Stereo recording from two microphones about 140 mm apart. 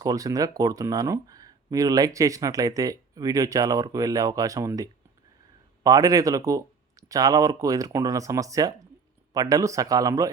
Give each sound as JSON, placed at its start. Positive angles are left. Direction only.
{"t": 0.0, "sound": "speech", "side_deg": -25}